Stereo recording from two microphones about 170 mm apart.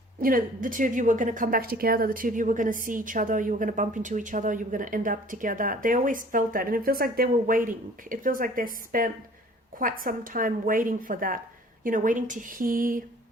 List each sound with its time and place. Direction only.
0.2 s a woman's voice: 55° right (ahead or behind)